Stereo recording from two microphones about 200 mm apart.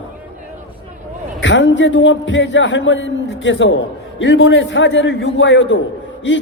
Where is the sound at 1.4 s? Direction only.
65° left (ahead or behind).